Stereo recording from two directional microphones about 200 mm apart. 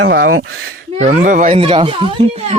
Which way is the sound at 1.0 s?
40° right (ahead or behind).